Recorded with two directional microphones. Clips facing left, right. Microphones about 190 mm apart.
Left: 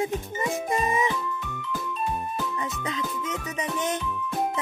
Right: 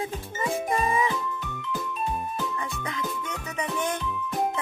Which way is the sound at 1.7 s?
Centre (ahead or behind).